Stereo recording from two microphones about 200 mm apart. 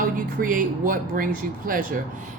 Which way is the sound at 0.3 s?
45° right (ahead or behind).